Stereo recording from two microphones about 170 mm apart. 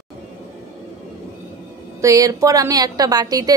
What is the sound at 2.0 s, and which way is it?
A woman's voice, 20° right (ahead or behind).